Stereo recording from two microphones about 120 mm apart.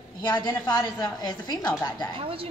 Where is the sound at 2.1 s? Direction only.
50° right (ahead or behind).